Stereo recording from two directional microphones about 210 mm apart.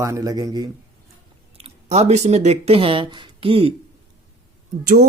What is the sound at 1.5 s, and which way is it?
Speech, 30° right (ahead or behind).